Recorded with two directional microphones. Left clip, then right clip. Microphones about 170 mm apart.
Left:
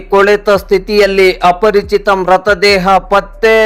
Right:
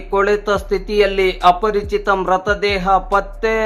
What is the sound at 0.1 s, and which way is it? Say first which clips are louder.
Speech: left 8 dB; 35° left (ahead or behind).